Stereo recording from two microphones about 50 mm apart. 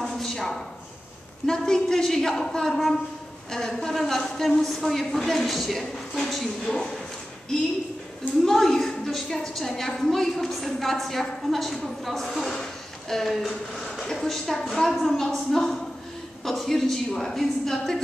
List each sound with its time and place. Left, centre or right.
0.0 s a sound: centre
1.4 s a woman's voice: centre
8.5 s a woman's voice: centre